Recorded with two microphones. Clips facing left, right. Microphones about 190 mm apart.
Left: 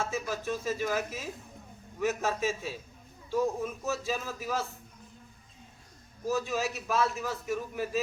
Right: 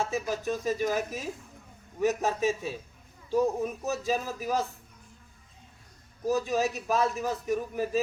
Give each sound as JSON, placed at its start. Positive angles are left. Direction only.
{"t": 0.0, "sound": "a man's voice", "side_deg": -15}
{"t": 6.2, "sound": "a man's voice", "side_deg": -15}